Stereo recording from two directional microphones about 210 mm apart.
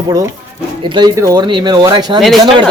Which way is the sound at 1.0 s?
20° right (ahead or behind).